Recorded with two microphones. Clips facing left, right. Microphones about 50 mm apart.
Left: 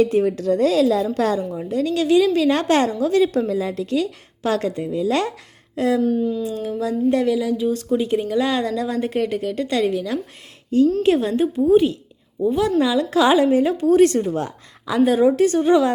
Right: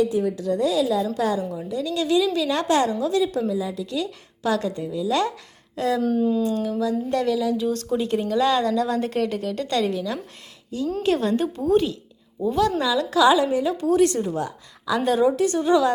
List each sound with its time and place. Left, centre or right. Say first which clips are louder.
0.0 s a woman's voice: left 4 dB; left
1.5 s a woman's voice: left 5 dB; left
3.8 s a woman's voice: left 6 dB; left
6.0 s speech: left 2 dB; centre
6.4 s a woman's voice: right 1 dB; centre
11.3 s a woman's voice: left 4 dB; centre; by 14.9 s left
14.9 s a woman's voice: left 4 dB; left